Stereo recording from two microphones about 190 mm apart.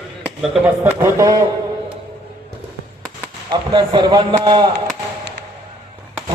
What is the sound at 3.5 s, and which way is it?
A man's voice, 25° right (ahead or behind).